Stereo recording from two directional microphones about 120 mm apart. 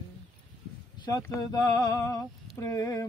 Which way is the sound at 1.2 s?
25° left (ahead or behind).